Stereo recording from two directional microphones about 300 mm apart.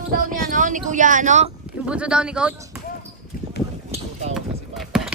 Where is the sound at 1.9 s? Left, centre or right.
Centre.